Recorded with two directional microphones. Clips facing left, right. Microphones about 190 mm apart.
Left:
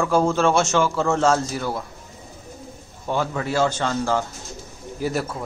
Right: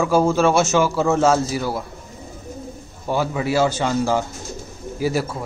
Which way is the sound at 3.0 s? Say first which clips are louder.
Right 3 dB; 10° right (ahead or behind).